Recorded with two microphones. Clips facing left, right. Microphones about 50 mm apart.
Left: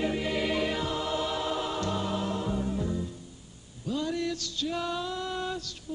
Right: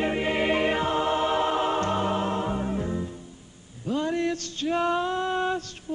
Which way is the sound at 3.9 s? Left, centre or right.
Right.